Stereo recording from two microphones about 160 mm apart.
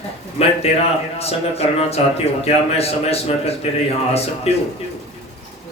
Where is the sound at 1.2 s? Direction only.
40° left (ahead or behind).